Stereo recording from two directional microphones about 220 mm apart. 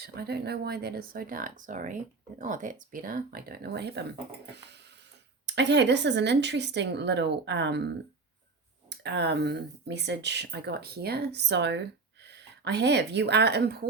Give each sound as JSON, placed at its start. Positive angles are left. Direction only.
{"t": 0.0, "sound": "speech", "side_deg": -45}
{"t": 8.9, "sound": "speech", "side_deg": -50}